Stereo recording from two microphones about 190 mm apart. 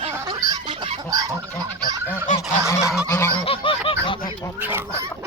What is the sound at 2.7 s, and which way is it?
Goose, 15° left (ahead or behind).